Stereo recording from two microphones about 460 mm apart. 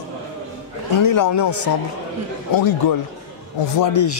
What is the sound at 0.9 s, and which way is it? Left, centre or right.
Speech, left.